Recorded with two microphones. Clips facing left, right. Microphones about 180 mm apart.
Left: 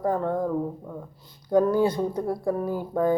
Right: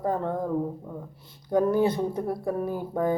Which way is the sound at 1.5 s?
20° right (ahead or behind).